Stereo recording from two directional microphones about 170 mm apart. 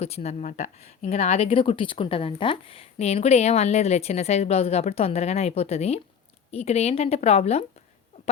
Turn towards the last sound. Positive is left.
turn(degrees=40)  # may be behind; listen again after turning